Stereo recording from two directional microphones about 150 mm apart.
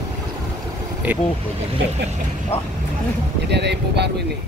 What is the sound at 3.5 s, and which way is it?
Speech, 90° right.